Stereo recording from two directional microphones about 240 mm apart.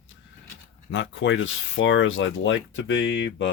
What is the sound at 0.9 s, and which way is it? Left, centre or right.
Speech, left.